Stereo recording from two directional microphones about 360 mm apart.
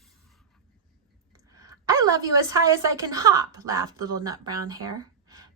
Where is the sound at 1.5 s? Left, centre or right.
Centre.